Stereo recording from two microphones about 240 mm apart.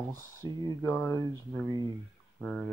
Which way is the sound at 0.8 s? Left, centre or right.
Centre.